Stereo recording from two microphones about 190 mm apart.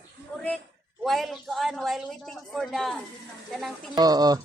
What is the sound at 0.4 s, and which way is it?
A woman's voice, 5° left (ahead or behind).